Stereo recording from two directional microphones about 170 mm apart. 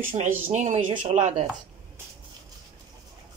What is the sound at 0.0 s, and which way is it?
Speech, 45° right (ahead or behind).